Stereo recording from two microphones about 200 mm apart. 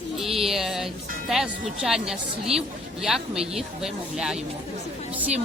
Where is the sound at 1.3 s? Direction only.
5° right (ahead or behind).